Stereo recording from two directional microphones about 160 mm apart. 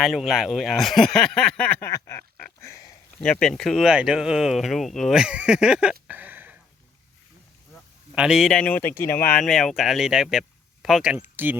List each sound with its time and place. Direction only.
0.0 s speech: centre (ahead or behind)
1.9 s a sound: 20° left (ahead or behind)
3.2 s speech: 5° left (ahead or behind); by 6.6 s 10° right (ahead or behind)
8.1 s speech: 5° right (ahead or behind)